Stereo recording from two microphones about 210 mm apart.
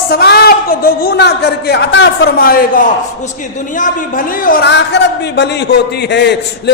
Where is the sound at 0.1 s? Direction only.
50° left (ahead or behind).